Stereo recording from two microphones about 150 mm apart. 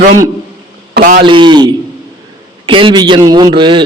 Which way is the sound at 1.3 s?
30° right (ahead or behind).